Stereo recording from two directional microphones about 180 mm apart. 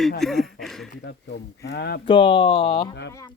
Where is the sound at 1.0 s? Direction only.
70° left (ahead or behind).